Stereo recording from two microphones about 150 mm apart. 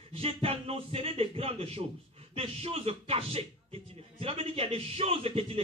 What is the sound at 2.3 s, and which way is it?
A man's voice, 40° right (ahead or behind).